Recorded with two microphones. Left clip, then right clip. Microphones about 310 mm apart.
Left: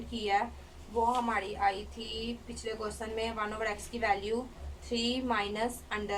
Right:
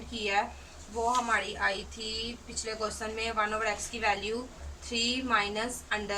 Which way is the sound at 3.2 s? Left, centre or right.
Centre.